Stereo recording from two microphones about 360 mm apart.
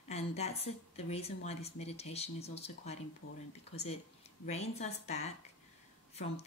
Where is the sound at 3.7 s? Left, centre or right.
Centre.